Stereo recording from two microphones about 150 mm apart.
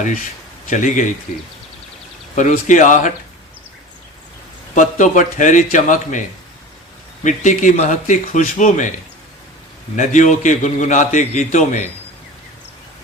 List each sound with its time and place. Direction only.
0.7 s a man's voice: 60° left (ahead or behind)
2.3 s a man's voice: 55° left (ahead or behind)
4.7 s a man's voice: 55° left (ahead or behind)
7.3 s a man's voice: 55° left (ahead or behind)
9.9 s a man's voice: 55° left (ahead or behind)